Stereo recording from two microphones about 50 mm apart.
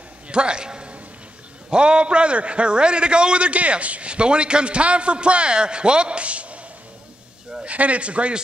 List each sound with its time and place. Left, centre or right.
0.3 s a sound: centre
1.7 s a man's voice: centre
7.6 s a man's voice: right